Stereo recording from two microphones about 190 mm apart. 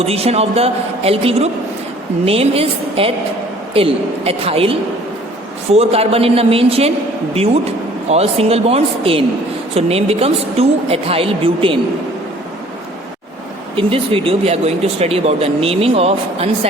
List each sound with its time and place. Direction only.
0.0 s a woman's voice: 30° right (ahead or behind)
13.7 s speech: 30° right (ahead or behind)